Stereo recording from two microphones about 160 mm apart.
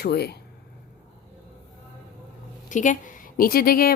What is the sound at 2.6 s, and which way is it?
A woman's voice, 55° left (ahead or behind).